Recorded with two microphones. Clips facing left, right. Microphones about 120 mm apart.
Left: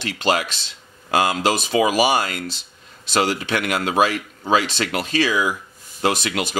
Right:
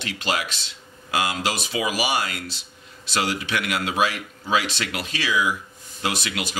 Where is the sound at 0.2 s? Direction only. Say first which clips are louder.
Left 7 dB; 45° left (ahead or behind).